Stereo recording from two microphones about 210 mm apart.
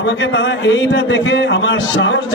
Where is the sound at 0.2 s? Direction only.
55° left (ahead or behind).